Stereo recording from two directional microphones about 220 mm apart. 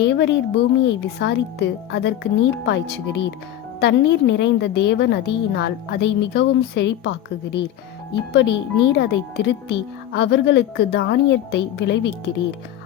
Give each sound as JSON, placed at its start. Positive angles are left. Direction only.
{"t": 0.1, "sound": "a woman's voice", "side_deg": 50}